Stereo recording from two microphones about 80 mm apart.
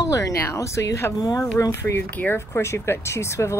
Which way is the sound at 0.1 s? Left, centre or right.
Left.